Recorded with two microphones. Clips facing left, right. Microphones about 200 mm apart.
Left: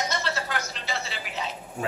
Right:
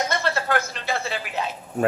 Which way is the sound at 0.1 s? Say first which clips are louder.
Right 6 dB; 55° right (ahead or behind).